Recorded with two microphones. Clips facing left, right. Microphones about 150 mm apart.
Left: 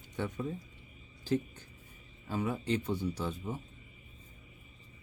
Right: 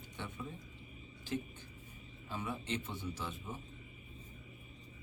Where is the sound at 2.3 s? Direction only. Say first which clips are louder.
Left 8 dB; 40° left (ahead or behind).